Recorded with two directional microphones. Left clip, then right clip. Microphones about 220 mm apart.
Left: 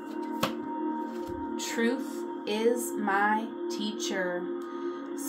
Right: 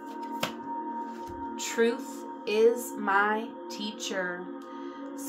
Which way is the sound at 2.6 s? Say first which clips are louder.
Right 4 dB; 15° right (ahead or behind).